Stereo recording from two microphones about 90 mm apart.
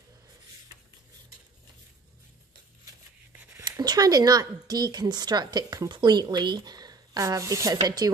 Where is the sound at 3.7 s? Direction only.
45° right (ahead or behind).